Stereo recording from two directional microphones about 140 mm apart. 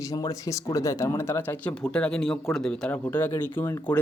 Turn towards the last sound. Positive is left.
turn(degrees=15)  # may be behind; listen again after turning